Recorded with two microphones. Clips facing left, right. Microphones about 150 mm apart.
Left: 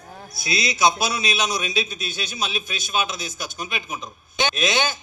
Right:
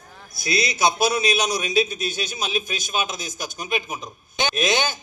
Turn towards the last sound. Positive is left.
turn(degrees=-50)  # may be behind; listen again after turning